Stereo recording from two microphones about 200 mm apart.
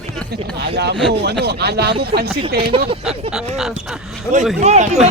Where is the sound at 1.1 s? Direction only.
55° right (ahead or behind).